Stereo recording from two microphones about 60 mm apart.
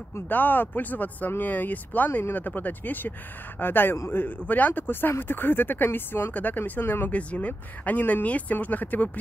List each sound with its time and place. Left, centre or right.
0.3 s speech: left
6.3 s speech: left